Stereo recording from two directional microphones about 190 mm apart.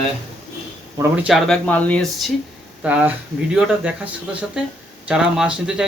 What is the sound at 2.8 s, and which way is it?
Speech, 5° right (ahead or behind).